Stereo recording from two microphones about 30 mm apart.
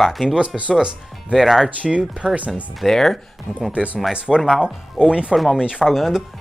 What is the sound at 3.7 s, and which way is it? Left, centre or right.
Speech, right.